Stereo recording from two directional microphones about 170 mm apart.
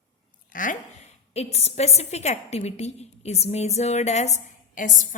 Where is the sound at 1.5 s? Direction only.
40° left (ahead or behind).